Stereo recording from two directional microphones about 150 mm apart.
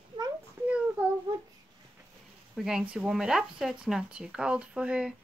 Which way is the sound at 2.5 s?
5° right (ahead or behind).